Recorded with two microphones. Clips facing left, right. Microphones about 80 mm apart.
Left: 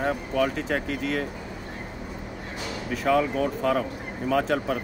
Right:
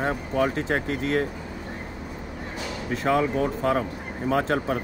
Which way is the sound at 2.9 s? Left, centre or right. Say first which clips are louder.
Even; right.